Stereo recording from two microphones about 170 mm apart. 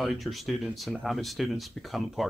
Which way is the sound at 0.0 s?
Centre (ahead or behind).